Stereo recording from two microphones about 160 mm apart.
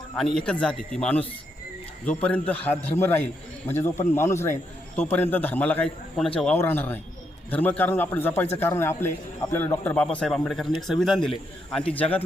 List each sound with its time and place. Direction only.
0.2 s a man's voice: centre (ahead or behind)